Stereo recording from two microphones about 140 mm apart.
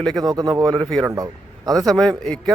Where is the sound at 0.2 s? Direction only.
25° right (ahead or behind).